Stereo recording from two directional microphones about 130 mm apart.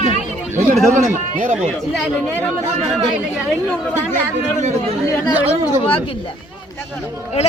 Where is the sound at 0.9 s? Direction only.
75° right (ahead or behind).